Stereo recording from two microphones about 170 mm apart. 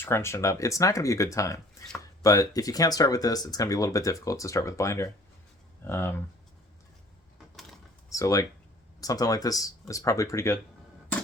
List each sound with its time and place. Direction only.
0.0 s speech: 15° left (ahead or behind)
8.1 s speech: 20° left (ahead or behind)